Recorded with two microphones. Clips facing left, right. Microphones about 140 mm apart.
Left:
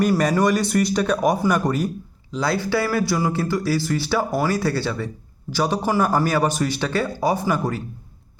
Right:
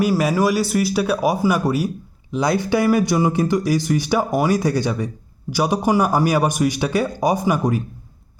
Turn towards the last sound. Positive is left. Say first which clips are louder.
# right 3 dB
turn(degrees=-15)  # may be behind; listen again after turning